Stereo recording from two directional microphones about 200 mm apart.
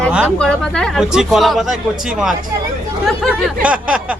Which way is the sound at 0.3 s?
5° left (ahead or behind).